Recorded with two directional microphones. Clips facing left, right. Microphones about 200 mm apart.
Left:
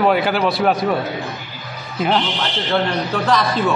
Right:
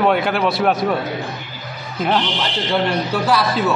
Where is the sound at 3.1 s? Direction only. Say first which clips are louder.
Left 1 dB; 10° right (ahead or behind).